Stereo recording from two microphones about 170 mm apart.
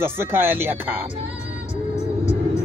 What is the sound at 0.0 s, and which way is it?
A man's voice, 15° right (ahead or behind).